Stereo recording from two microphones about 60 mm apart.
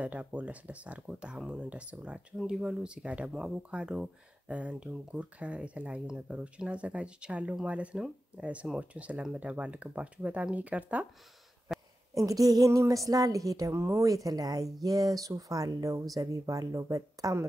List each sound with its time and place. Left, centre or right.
0.0 s speech: right
2.3 s speech: centre; by 11.1 s right
12.1 s speech: right
13.7 s speech: right
14.0 s speech: right